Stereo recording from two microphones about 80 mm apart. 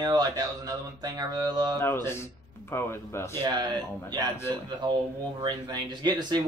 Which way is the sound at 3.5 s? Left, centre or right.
Right.